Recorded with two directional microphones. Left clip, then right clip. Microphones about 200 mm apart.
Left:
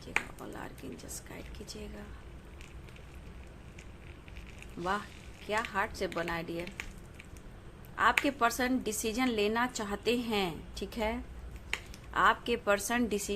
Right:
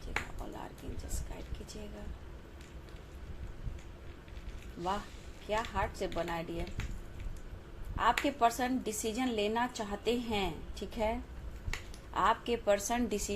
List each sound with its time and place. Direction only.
0.1 s finger snapping: 20° left (ahead or behind)
1.3 s speech: 20° left (ahead or behind)
5.5 s a woman's voice: 15° left (ahead or behind)
7.9 s a woman's voice: 20° left (ahead or behind)